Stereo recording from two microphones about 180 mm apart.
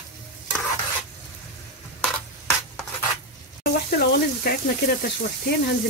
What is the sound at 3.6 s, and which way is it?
Sizzle, 65° left (ahead or behind).